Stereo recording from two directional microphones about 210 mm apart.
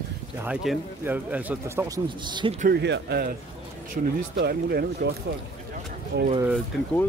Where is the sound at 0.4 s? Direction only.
10° right (ahead or behind).